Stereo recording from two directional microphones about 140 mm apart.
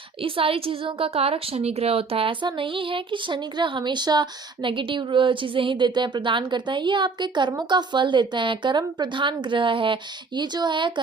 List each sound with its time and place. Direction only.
0.2 s a woman's voice: 40° right (ahead or behind)